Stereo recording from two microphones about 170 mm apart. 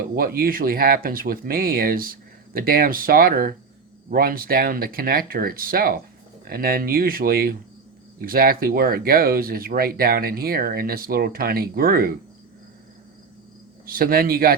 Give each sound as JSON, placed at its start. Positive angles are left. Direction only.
{"t": 0.0, "sound": "speech", "side_deg": -60}
{"t": 13.8, "sound": "speech", "side_deg": -60}